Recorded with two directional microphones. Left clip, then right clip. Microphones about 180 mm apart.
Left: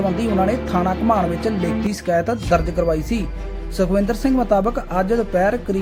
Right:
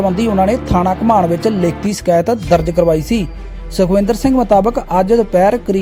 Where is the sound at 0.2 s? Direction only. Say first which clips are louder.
Right 6 dB; 35° right (ahead or behind).